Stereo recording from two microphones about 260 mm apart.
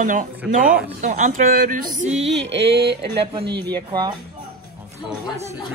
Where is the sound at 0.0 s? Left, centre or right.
Right.